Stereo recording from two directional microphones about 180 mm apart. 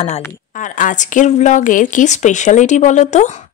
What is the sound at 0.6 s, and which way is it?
Speech, 45° left (ahead or behind).